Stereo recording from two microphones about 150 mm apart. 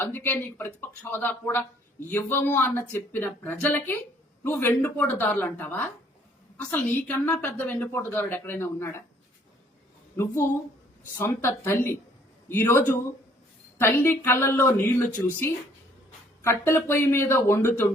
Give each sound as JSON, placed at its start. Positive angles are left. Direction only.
{"t": 0.0, "sound": "a woman's voice", "side_deg": 15}
{"t": 11.2, "sound": "a woman's voice", "side_deg": 15}